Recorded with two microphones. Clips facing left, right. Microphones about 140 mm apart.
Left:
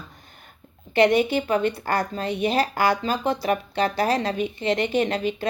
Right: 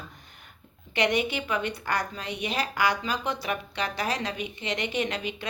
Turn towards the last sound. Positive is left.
turn(degrees=40)  # may be behind; listen again after turning